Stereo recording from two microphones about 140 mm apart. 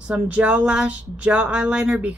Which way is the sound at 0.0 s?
10° right (ahead or behind).